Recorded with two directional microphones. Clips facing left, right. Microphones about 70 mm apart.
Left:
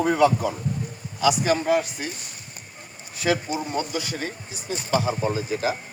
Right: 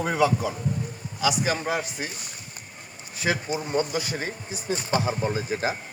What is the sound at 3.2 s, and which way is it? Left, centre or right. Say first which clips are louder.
Speech: left 3 dB; right.